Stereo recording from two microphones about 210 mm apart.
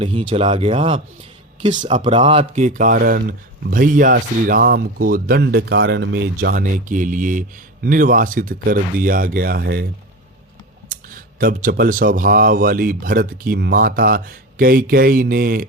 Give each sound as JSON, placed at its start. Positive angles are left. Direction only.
{"t": 0.0, "sound": "speech", "side_deg": -25}
{"t": 10.8, "sound": "speech", "side_deg": -40}